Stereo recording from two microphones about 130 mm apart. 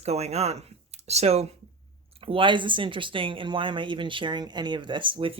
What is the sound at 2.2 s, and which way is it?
Speech, 40° right (ahead or behind).